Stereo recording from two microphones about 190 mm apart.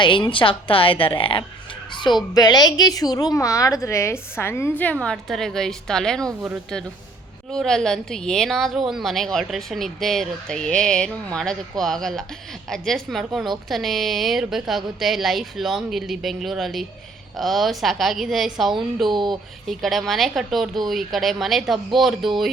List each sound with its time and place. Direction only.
0.0 s a woman's voice: 25° left (ahead or behind); by 6.2 s 5° left (ahead or behind)
6.2 s speech: 15° right (ahead or behind)
7.5 s a woman's voice: centre (ahead or behind)
19.1 s speech: 25° right (ahead or behind)
19.6 s a woman's voice: centre (ahead or behind)